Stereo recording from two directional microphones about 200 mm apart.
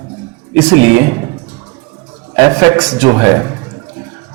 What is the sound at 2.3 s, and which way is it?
A man's voice, 15° right (ahead or behind).